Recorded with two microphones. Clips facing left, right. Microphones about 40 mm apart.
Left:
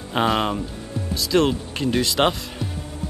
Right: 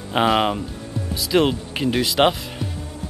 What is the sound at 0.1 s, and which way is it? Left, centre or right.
Speech, centre.